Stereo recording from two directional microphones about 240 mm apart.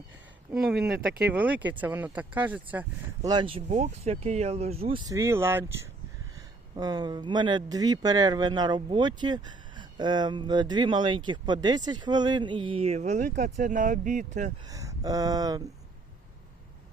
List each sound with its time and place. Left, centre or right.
0.8 s speech: right
1.3 s speech: centre
3.2 s speech: centre
6.7 s speech: centre; by 14.3 s right
14.6 s speech: centre